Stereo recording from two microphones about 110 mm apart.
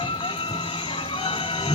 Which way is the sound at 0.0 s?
50° left (ahead or behind).